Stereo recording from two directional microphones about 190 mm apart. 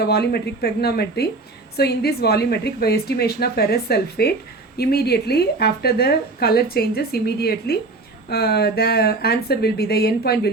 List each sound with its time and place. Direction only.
0.0 s a woman's voice: 55° left (ahead or behind)